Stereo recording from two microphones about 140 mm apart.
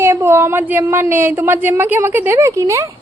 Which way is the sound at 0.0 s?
15° right (ahead or behind).